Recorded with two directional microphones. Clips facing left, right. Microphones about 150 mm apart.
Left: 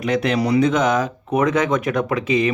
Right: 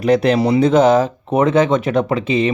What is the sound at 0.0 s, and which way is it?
Speech, 35° right (ahead or behind).